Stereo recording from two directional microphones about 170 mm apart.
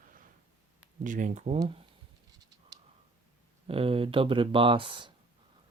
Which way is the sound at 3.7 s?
35° right (ahead or behind).